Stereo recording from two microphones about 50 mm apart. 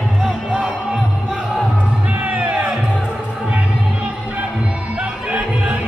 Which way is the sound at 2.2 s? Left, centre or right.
Right.